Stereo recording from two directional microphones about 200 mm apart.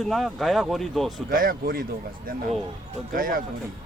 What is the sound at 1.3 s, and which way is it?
Speech, 45° right (ahead or behind).